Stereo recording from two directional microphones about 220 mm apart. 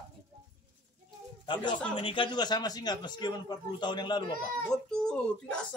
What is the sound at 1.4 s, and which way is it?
A man's voice, 20° left (ahead or behind).